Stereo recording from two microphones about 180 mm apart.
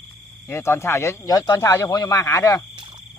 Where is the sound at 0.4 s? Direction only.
15° left (ahead or behind).